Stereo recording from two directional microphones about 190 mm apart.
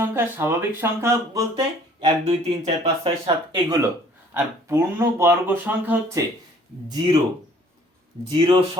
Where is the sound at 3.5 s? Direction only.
20° right (ahead or behind).